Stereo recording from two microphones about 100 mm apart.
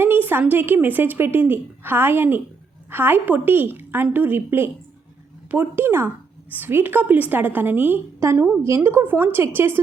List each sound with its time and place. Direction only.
0.0 s a woman's voice: 20° right (ahead or behind)